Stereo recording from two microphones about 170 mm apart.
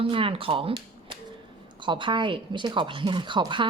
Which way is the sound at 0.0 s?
30° right (ahead or behind).